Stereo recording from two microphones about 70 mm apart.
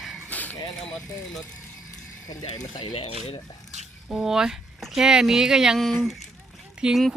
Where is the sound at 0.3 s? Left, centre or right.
Left.